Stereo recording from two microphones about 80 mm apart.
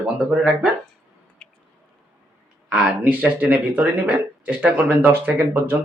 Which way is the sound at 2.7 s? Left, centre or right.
Centre.